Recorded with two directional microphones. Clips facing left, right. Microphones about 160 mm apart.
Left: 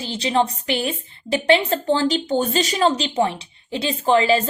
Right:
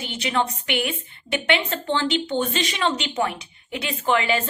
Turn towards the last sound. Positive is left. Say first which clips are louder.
# left 5 dB
turn(degrees=30)  # may be behind; listen again after turning